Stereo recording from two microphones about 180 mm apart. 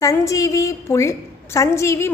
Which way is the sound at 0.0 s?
15° left (ahead or behind).